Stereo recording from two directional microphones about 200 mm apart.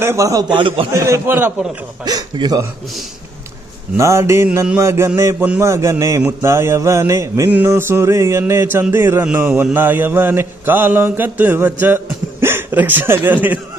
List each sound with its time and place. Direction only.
0.0 s mantra: 15° right (ahead or behind)
3.9 s mantra: 15° right (ahead or behind)